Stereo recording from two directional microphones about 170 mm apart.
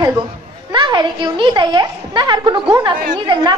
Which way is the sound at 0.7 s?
25° right (ahead or behind).